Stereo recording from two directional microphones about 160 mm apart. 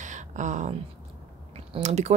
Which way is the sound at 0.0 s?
50° right (ahead or behind).